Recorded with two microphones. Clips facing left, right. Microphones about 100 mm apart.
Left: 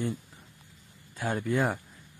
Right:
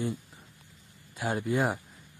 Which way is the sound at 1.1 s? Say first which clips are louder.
Even; 15° right (ahead or behind).